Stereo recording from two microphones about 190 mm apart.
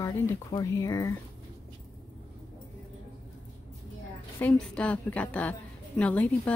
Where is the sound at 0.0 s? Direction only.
15° left (ahead or behind).